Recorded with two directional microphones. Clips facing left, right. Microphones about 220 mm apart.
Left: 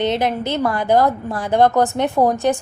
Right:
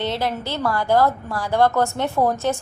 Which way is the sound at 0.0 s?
20° left (ahead or behind).